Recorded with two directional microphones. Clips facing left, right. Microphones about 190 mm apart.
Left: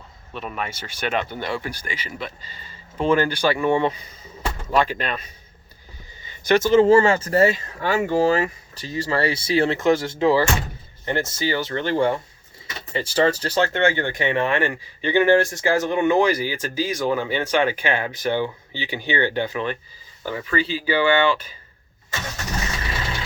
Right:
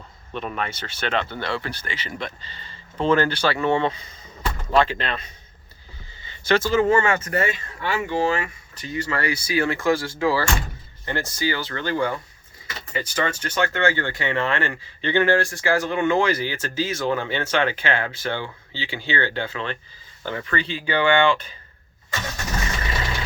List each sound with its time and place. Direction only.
0.3 s speech: 5° left (ahead or behind)